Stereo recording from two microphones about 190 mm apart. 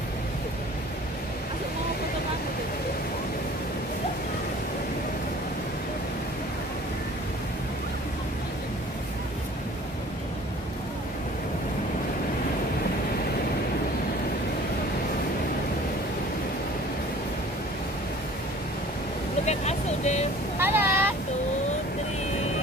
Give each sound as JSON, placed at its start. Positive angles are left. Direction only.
{"t": 19.4, "sound": "vehicle", "side_deg": 35}
{"t": 20.5, "sound": "vehicle", "side_deg": -10}